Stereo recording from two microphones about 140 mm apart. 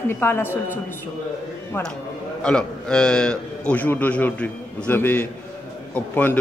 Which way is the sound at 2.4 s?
5° left (ahead or behind).